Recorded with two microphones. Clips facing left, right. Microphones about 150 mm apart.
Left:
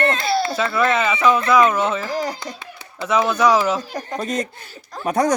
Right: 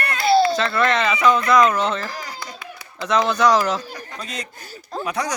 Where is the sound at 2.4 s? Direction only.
25° left (ahead or behind).